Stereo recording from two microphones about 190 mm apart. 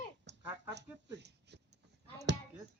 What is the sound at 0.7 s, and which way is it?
Speech, 65° right (ahead or behind).